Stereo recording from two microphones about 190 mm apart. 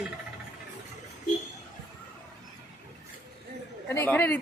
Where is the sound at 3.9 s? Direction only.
10° left (ahead or behind).